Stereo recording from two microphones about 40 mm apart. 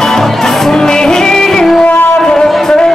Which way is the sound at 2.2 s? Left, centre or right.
Centre.